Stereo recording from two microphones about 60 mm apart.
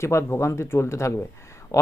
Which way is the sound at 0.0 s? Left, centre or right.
Left.